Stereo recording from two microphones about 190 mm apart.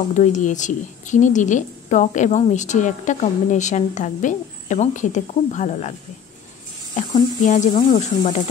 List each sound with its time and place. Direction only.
0.1 s a woman's voice: 40° left (ahead or behind)
7.4 s a woman's voice: 40° left (ahead or behind)